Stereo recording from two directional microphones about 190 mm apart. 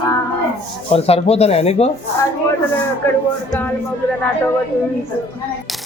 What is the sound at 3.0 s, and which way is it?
Speech, 15° left (ahead or behind).